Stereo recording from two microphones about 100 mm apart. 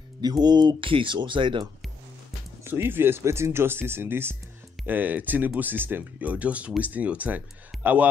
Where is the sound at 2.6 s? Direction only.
20° right (ahead or behind).